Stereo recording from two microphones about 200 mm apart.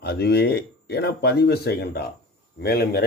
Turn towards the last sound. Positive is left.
turn(degrees=50)  # may be behind; listen again after turning